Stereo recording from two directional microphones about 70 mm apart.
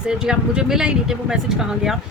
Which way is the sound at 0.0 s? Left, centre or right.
Centre.